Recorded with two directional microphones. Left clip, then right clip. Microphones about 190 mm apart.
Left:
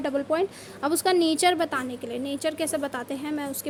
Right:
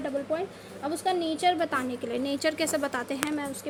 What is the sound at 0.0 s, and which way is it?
A woman's voice, 30° left (ahead or behind).